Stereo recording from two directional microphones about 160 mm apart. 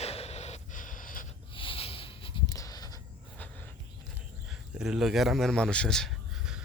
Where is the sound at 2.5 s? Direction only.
20° left (ahead or behind).